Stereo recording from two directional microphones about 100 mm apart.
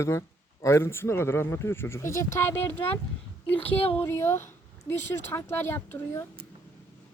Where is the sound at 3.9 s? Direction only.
25° left (ahead or behind).